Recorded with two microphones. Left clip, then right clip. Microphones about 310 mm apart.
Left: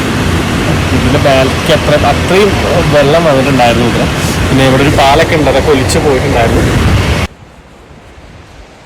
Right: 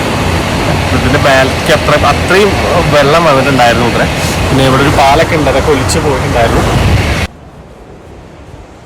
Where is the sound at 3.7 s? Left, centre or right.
Centre.